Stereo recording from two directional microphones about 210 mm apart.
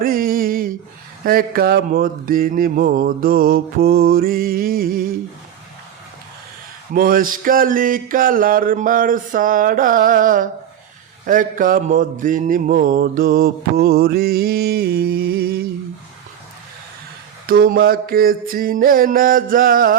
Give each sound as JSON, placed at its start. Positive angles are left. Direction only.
{"t": 0.0, "sound": "a sound", "side_deg": -45}
{"t": 1.2, "sound": "mantra", "side_deg": -45}
{"t": 6.9, "sound": "mantra", "side_deg": -40}
{"t": 17.4, "sound": "mantra", "side_deg": -45}